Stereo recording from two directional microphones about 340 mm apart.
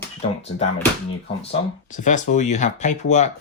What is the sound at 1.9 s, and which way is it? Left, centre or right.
Speech, left.